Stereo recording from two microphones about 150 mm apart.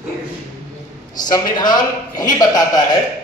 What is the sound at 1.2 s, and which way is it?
A man's voice, 25° left (ahead or behind).